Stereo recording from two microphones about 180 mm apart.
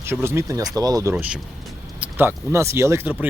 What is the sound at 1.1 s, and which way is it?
Speech, 5° right (ahead or behind).